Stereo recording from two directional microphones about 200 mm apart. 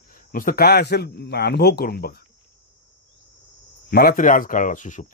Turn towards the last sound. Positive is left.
turn(degrees=40)  # may be behind; listen again after turning